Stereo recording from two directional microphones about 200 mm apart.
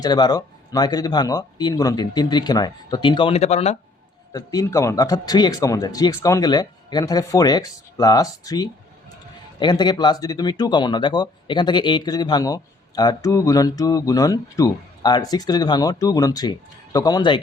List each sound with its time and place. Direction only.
0.0 s speech: 20° left (ahead or behind)
4.3 s speech: 20° left (ahead or behind)